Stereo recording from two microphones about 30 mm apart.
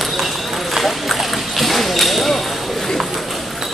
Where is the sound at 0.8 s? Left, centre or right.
Centre.